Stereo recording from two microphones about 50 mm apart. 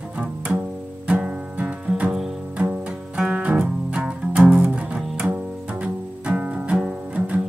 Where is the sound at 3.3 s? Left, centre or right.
Right.